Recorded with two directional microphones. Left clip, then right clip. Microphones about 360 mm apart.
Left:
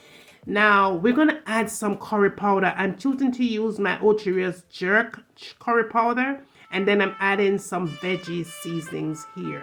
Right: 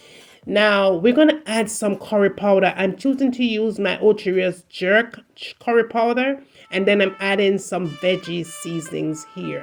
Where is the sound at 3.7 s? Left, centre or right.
Centre.